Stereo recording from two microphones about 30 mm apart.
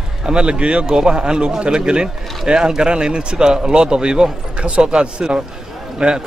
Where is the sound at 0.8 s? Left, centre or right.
Right.